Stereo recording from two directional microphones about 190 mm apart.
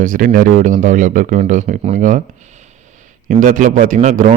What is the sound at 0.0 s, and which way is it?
Speech, 45° right (ahead or behind).